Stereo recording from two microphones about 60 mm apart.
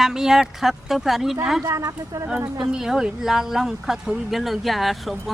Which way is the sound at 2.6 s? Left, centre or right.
Centre.